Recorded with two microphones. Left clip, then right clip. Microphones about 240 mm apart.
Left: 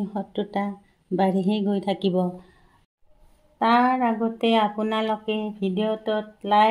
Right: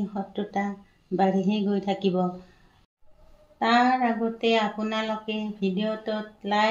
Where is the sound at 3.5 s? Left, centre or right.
Left.